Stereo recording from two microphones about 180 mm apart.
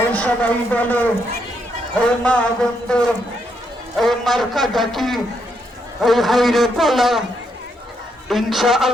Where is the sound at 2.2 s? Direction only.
5° left (ahead or behind).